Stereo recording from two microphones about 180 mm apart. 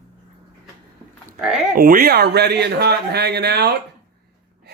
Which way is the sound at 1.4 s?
5° right (ahead or behind).